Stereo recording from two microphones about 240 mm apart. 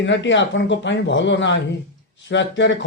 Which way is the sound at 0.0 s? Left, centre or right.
Left.